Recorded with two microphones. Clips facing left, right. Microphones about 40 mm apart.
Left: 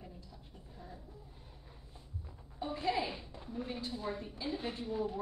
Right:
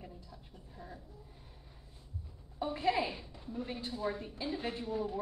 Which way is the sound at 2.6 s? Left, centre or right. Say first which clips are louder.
Right 3 dB; right.